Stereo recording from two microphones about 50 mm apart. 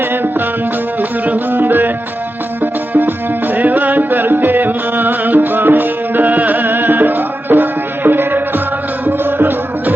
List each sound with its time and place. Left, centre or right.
1.5 s music: right
2.9 s music: right